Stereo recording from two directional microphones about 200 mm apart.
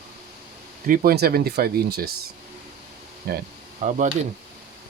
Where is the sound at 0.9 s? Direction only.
45° right (ahead or behind).